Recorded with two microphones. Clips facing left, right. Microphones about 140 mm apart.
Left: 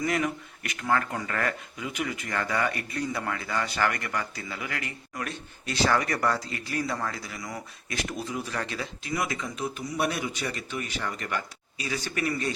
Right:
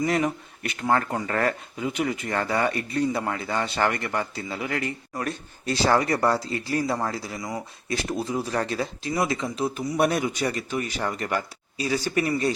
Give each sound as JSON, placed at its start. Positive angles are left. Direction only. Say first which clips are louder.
{"t": 0.0, "sound": "speech", "louder": "right 4 dB", "side_deg": -30}